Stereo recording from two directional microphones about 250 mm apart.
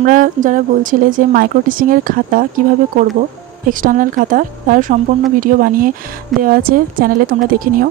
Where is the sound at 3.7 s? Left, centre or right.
Right.